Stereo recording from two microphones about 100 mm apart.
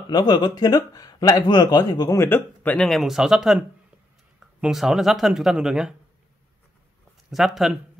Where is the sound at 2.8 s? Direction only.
Centre (ahead or behind).